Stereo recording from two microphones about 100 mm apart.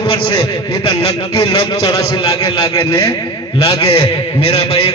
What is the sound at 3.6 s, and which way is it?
A man's voice, 75° left (ahead or behind).